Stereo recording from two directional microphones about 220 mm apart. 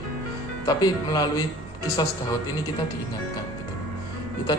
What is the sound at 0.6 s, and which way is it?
Speech, 20° left (ahead or behind).